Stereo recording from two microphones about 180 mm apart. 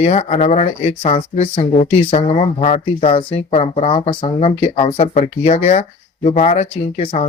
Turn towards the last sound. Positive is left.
turn(degrees=35)  # may be behind; listen again after turning